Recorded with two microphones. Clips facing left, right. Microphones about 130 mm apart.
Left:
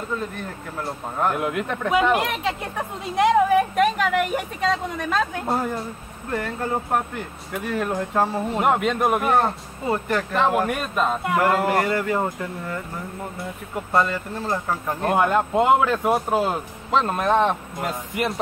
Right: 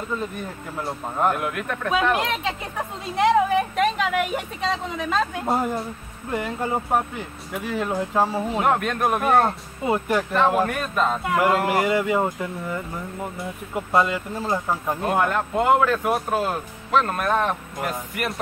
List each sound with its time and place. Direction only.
0.4 s speech: 5° right (ahead or behind)
1.3 s speech: 20° left (ahead or behind)
1.9 s a woman's voice: 10° left (ahead or behind)
8.5 s speech: 10° left (ahead or behind)
9.3 s speech: 10° right (ahead or behind)
10.6 s speech: 10° left (ahead or behind)
11.4 s speech: 10° right (ahead or behind)
13.9 s speech: 10° right (ahead or behind)
15.0 s speech: 15° left (ahead or behind)